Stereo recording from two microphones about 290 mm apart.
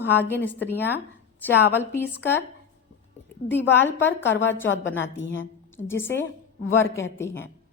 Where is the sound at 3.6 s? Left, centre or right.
Centre.